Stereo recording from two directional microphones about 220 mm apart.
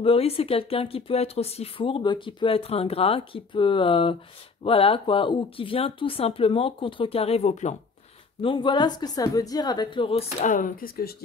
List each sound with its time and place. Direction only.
0.0 s speech: 25° left (ahead or behind); by 11.1 s 40° left (ahead or behind)